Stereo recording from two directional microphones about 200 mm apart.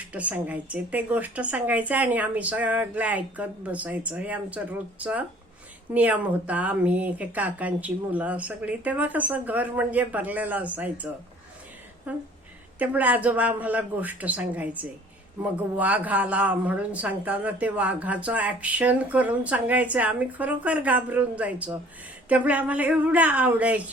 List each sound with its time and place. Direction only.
0.1 s a woman's voice: 5° right (ahead or behind)